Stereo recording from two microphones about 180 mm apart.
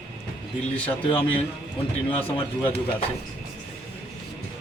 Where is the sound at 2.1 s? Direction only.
30° left (ahead or behind).